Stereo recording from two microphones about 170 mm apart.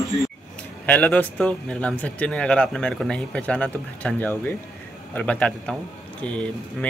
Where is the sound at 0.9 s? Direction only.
10° left (ahead or behind).